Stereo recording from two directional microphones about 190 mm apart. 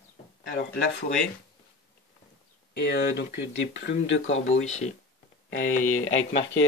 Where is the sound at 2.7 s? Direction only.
60° left (ahead or behind).